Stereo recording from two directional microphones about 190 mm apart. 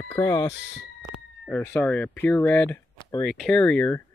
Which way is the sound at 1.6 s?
10° left (ahead or behind).